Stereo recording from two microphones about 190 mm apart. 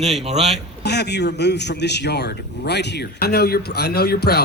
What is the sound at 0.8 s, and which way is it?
A man's voice, 60° left (ahead or behind).